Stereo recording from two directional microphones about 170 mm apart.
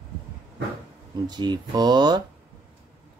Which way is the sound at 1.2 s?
25° right (ahead or behind).